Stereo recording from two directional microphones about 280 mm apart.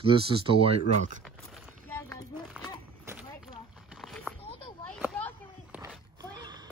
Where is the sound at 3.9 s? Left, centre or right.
Centre.